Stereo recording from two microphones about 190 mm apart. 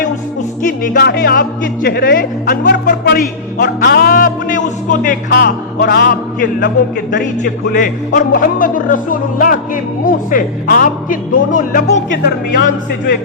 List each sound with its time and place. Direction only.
0.6 s speech: 55° left (ahead or behind)
2.8 s music: 55° left (ahead or behind)
3.6 s speech: 50° left (ahead or behind)